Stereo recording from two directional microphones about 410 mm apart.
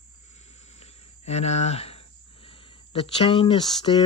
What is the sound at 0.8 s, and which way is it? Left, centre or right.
Cricket, centre.